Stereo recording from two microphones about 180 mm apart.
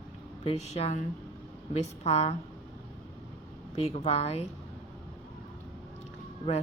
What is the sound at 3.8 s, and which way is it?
Speech, 35° left (ahead or behind).